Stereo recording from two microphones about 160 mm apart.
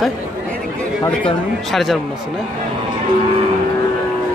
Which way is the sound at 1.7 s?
Centre (ahead or behind).